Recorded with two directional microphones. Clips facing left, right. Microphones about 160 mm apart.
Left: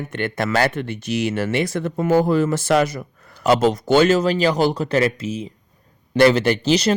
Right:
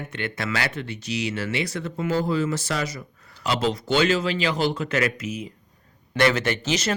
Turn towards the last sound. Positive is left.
turn(degrees=35)  # may be behind; listen again after turning